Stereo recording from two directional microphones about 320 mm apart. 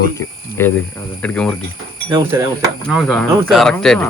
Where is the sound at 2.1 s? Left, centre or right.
Centre.